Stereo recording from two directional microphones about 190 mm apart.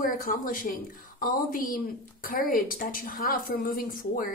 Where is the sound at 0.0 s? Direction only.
45° left (ahead or behind).